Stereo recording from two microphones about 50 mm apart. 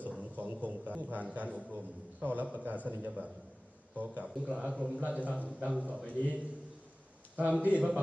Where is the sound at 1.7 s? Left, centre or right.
Right.